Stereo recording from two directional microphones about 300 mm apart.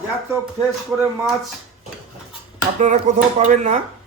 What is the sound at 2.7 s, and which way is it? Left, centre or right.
A man's voice, right.